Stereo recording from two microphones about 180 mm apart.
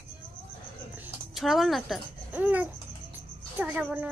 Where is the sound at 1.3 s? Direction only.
Centre (ahead or behind).